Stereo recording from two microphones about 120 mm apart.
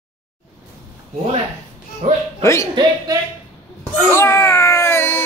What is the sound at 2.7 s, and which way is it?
Speech, 35° right (ahead or behind).